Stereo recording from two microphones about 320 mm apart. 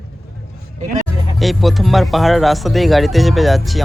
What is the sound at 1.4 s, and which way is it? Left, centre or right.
Speech, centre.